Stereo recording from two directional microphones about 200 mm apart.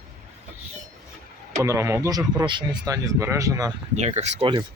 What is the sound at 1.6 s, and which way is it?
Speech, 15° right (ahead or behind).